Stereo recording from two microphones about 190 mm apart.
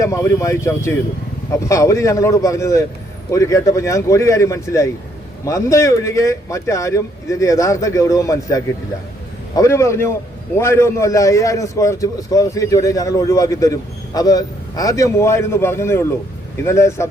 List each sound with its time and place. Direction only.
0.0 s a man's voice: 15° left (ahead or behind)